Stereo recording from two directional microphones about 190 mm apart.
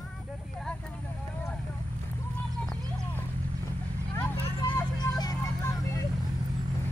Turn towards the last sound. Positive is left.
turn(degrees=15)  # may be behind; listen again after turning